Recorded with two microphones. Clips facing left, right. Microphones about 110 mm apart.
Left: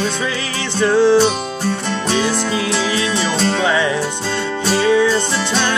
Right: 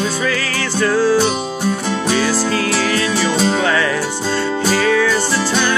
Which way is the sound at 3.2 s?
5° right (ahead or behind).